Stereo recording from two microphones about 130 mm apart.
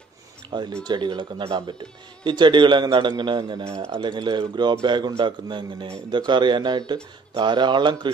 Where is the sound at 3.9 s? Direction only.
35° right (ahead or behind).